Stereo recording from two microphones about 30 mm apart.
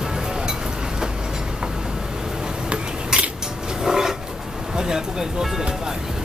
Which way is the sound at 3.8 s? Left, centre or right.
Centre.